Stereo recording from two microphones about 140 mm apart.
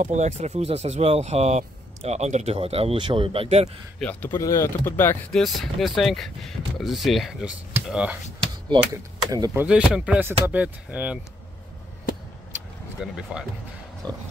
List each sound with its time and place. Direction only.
0.0 s speech: 55° right (ahead or behind)
4.0 s speech: 10° left (ahead or behind)
4.4 s speech: 20° left (ahead or behind)
5.3 s speech: centre (ahead or behind)
8.9 s speech: 25° right (ahead or behind)
9.5 s speech: 5° right (ahead or behind)
13.0 s speech: 5° right (ahead or behind)
14.0 s speech: 30° right (ahead or behind)